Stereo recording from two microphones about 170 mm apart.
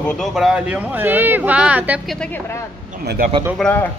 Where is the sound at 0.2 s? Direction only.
Centre (ahead or behind).